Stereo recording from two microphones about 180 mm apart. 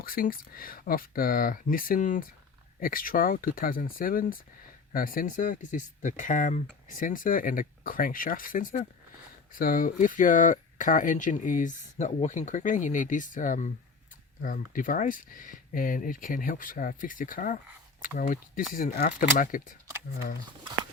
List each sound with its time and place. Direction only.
0.0 s speech: 55° left (ahead or behind)